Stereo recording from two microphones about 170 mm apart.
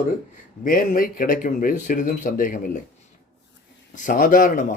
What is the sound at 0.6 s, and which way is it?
Speech, 55° left (ahead or behind).